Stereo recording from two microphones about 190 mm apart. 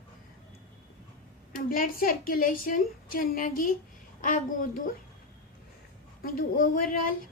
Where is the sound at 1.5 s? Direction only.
50° left (ahead or behind).